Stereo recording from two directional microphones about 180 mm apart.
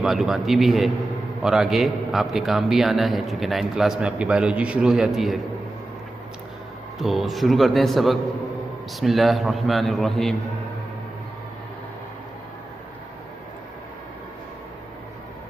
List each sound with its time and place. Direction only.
0.0 s a man's voice: centre (ahead or behind)
7.0 s a man's voice: centre (ahead or behind)